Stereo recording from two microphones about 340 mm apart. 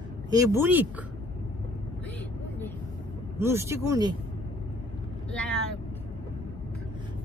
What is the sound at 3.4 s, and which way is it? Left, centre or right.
Speech, centre.